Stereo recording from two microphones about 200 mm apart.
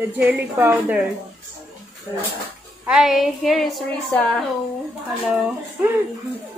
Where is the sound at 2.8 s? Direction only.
Centre (ahead or behind).